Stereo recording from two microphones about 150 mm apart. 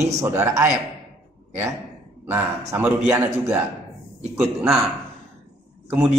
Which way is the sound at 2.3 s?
15° right (ahead or behind).